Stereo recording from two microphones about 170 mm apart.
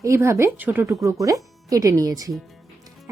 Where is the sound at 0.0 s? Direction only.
15° right (ahead or behind).